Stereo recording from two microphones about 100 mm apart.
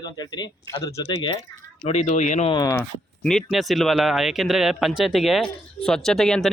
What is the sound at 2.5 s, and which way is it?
Speech, 40° left (ahead or behind).